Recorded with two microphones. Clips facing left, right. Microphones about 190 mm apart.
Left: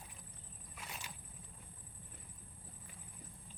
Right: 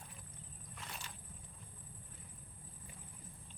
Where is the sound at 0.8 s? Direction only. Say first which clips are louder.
Left 1 dB; 10° left (ahead or behind).